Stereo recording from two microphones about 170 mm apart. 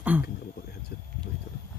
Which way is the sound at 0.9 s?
60° left (ahead or behind).